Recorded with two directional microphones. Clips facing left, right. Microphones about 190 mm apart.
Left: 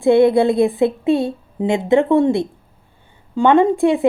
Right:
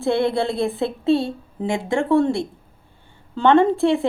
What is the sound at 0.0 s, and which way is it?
A woman's voice, 15° left (ahead or behind).